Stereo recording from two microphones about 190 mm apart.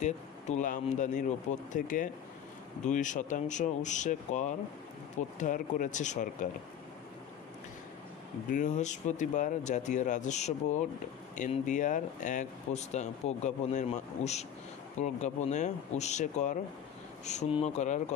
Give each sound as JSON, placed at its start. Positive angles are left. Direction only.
{"t": 0.0, "sound": "speech", "side_deg": 40}
{"t": 8.5, "sound": "speech", "side_deg": 40}